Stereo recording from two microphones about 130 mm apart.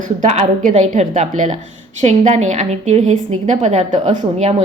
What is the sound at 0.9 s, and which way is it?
A woman's voice, 70° right (ahead or behind).